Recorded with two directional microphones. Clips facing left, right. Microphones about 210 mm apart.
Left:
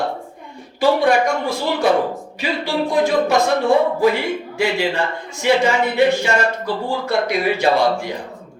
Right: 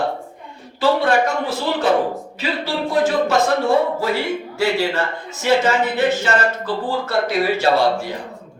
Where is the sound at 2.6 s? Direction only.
15° left (ahead or behind).